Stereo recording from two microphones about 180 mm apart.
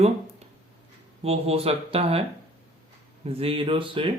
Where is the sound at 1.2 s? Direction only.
35° right (ahead or behind).